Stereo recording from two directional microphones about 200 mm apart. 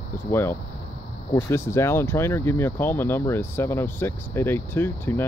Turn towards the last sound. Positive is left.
turn(degrees=10)  # may be behind; listen again after turning